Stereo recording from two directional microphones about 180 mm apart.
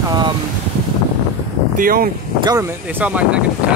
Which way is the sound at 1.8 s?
55° right (ahead or behind).